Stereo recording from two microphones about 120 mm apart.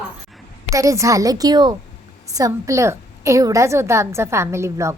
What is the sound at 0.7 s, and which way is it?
A woman's voice, 25° right (ahead or behind).